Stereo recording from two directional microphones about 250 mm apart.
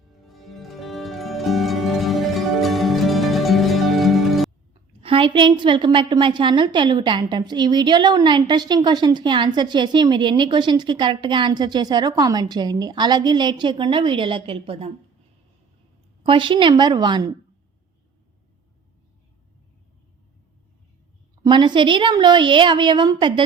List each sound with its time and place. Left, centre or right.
0.3 s music: centre
5.0 s a woman's voice: right
16.2 s a woman's voice: centre
21.4 s a woman's voice: centre